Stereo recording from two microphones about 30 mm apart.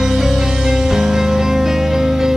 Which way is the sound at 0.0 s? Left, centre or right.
Centre.